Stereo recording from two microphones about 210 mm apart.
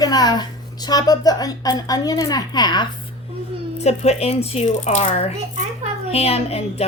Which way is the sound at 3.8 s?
30° left (ahead or behind).